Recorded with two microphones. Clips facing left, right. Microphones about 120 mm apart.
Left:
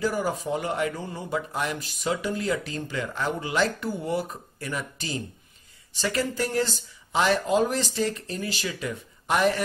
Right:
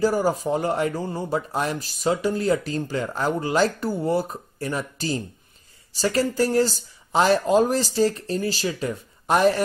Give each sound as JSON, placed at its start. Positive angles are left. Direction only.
{"t": 0.0, "sound": "speech", "side_deg": -35}